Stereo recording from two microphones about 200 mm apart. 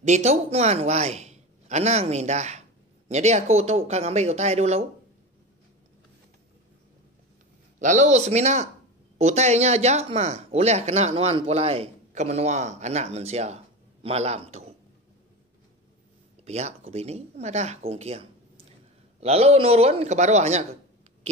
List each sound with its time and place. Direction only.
0.0 s a man's voice: 35° right (ahead or behind)
7.8 s speech: 35° right (ahead or behind)
16.4 s speech: 35° right (ahead or behind)